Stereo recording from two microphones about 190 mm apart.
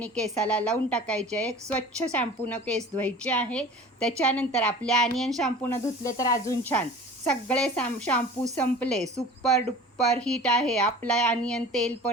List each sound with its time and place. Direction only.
0.0 s speech: 5° left (ahead or behind)
5.7 s speech: 15° left (ahead or behind)